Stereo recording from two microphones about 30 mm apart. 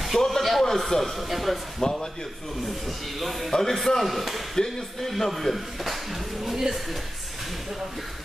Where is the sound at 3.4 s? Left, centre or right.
Centre.